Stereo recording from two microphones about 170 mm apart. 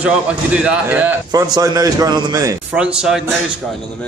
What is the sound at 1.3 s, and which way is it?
A man's voice, 20° right (ahead or behind).